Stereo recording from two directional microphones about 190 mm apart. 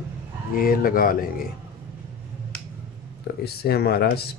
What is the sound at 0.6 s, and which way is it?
Speech, 50° left (ahead or behind).